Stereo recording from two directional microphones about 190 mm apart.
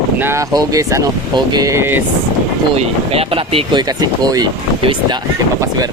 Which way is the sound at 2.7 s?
30° right (ahead or behind).